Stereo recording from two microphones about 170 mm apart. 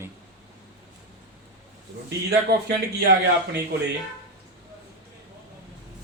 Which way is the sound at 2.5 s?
70° right (ahead or behind).